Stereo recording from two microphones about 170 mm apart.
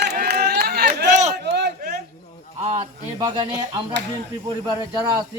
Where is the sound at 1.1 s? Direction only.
45° right (ahead or behind).